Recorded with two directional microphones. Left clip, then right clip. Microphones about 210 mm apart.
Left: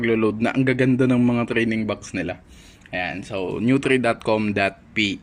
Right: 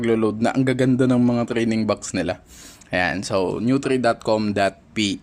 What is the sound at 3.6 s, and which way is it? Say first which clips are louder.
Speech: left 1 dB; centre (ahead or behind).